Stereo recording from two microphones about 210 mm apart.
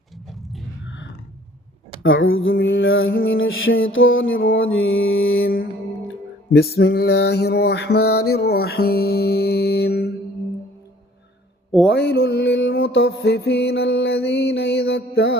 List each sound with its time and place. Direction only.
0.3 s a sound: centre (ahead or behind)
2.0 s music: 70° left (ahead or behind)
6.5 s mantra: 50° left (ahead or behind)
11.9 s music: 55° left (ahead or behind)